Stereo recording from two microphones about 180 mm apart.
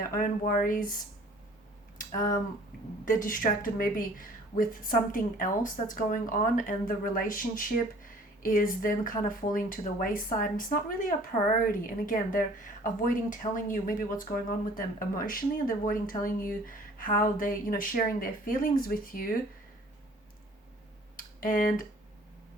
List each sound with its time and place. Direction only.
0.1 s a woman's voice: 50° left (ahead or behind)
21.2 s tick: 50° left (ahead or behind)